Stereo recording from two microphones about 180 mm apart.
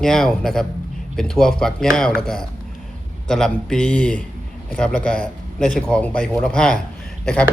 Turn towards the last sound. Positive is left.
turn(degrees=5)  # may be behind; listen again after turning